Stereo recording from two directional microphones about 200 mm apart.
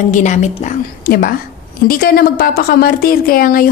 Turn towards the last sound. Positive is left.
turn(degrees=45)  # may be behind; listen again after turning